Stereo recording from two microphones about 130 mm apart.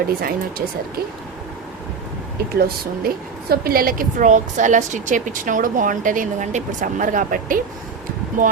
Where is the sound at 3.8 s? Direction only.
90° right.